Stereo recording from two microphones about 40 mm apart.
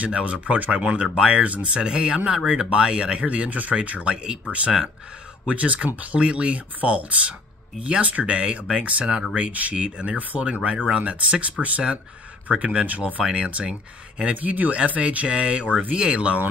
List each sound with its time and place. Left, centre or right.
0.0 s speech: right
1.0 s speech: centre
1.3 s speech: right
14.3 s speech: right